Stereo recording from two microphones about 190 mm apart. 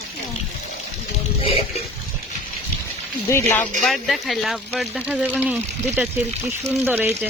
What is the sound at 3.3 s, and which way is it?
Speech, 15° left (ahead or behind).